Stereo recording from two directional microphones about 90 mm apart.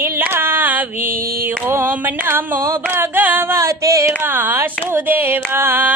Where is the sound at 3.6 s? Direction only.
35° right (ahead or behind).